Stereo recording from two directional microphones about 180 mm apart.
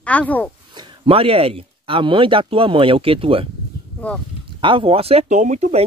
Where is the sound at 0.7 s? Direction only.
25° right (ahead or behind).